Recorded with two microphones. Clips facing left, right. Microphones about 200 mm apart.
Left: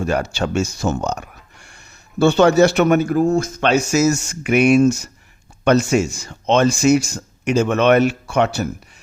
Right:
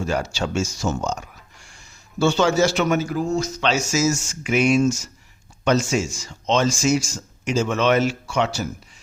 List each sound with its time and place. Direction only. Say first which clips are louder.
0.0 s speech: left 4 dB; 60° left (ahead or behind)